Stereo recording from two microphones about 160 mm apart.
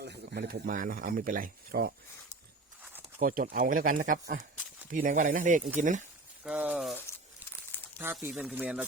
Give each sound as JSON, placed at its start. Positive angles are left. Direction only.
{"t": 0.0, "sound": "speech", "side_deg": -90}
{"t": 3.2, "sound": "speech", "side_deg": -60}
{"t": 6.4, "sound": "speech", "side_deg": -5}
{"t": 7.7, "sound": "crumpling", "side_deg": 10}
{"t": 8.3, "sound": "speech", "side_deg": -5}